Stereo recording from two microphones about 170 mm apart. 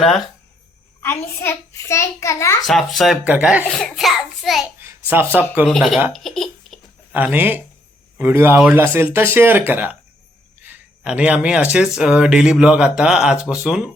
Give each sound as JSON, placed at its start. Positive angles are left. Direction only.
{"t": 1.0, "sound": "a child's voice", "side_deg": 15}
{"t": 2.6, "sound": "speech", "side_deg": 0}
{"t": 3.6, "sound": "speech", "side_deg": 5}
{"t": 4.8, "sound": "speech", "side_deg": -15}
{"t": 5.6, "sound": "speech", "side_deg": 0}
{"t": 7.1, "sound": "speech", "side_deg": -10}